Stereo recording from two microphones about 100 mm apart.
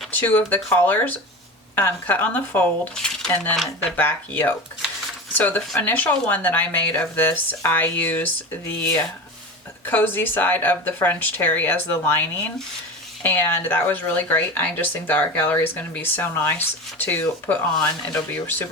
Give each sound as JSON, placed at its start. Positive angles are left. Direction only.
{"t": 0.1, "sound": "speech", "side_deg": 15}
{"t": 2.9, "sound": "speech", "side_deg": 5}
{"t": 3.9, "sound": "speech", "side_deg": 20}